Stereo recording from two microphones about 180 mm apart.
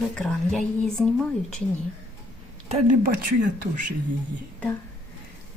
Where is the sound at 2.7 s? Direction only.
45° right (ahead or behind).